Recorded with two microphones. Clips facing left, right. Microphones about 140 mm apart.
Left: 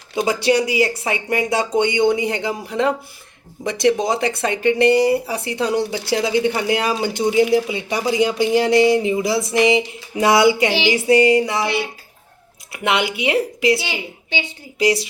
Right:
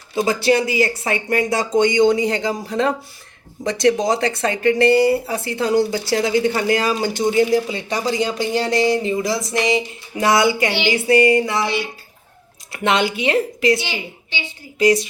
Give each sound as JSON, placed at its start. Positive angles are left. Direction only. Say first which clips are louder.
{"t": 0.2, "sound": "speech", "louder": "even", "side_deg": 15}
{"t": 10.9, "sound": "music", "louder": "even", "side_deg": 20}
{"t": 12.7, "sound": "speech", "louder": "right 2 dB", "side_deg": 10}